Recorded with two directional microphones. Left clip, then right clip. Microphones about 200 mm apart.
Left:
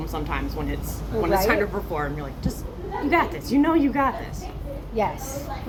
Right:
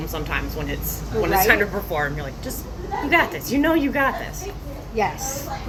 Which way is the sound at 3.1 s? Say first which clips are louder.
Right 2 dB; 15° right (ahead or behind).